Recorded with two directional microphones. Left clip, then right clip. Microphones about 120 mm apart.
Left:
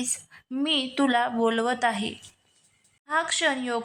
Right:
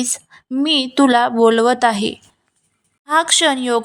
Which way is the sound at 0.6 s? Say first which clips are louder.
Right 10 dB; 55° right (ahead or behind).